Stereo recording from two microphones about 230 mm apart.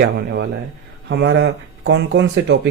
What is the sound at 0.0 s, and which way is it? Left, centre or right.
Speech, right.